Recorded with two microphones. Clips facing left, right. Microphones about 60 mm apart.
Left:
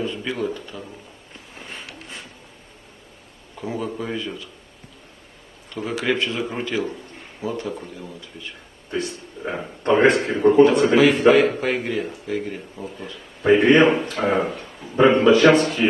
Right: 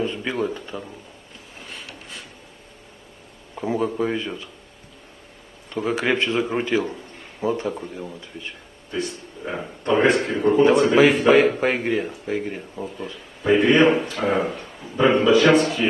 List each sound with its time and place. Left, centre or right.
0.0 s a sound: centre
0.7 s a man's voice: centre
3.5 s a man's voice: centre
6.0 s a man's voice: centre
6.8 s a sound: centre
7.7 s a man's voice: centre
8.9 s a man's voice: centre
11.6 s a man's voice: centre